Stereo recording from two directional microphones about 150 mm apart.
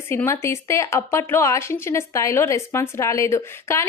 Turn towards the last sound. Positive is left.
turn(degrees=20)  # may be behind; listen again after turning